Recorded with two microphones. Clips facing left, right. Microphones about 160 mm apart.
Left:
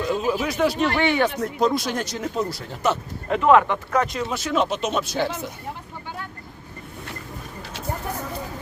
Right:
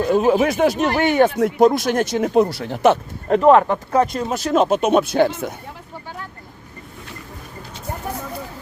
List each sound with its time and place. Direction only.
0.0 s speech: 55° right (ahead or behind)
1.4 s speech: 90° right
1.6 s speech: 50° right (ahead or behind)
3.2 s speech: 40° right (ahead or behind)
4.8 s speech: 55° right (ahead or behind)